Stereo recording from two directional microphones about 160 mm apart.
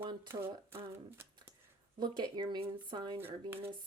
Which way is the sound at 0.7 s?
15° right (ahead or behind).